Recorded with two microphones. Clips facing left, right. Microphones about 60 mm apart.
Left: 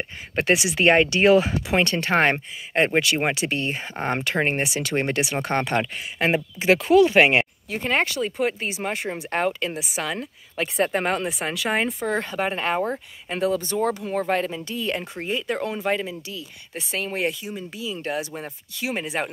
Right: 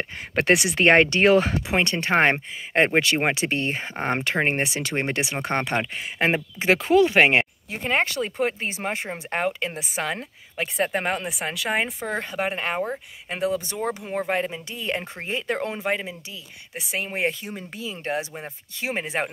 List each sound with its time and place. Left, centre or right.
0.4 s speech: right
1.7 s speech: right
7.7 s speech: centre
8.0 s speech: right
9.1 s speech: centre
9.8 s speech: right
10.6 s speech: centre; by 15.8 s right
15.8 s speech: centre
17.3 s speech: right